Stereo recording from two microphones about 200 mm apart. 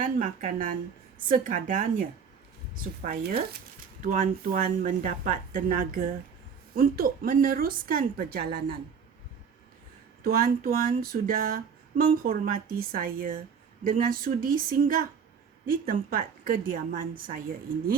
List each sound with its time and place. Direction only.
0.0 s a woman's voice: 40° right (ahead or behind)
10.2 s a woman's voice: 45° right (ahead or behind)
11.0 s a sound: 45° right (ahead or behind)
12.1 s a woman's voice: 45° right (ahead or behind)